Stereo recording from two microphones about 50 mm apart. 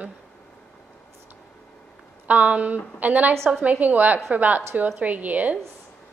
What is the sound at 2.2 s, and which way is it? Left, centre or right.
A woman's voice, right.